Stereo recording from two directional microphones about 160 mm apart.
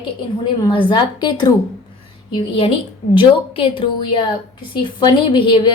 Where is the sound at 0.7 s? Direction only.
30° left (ahead or behind).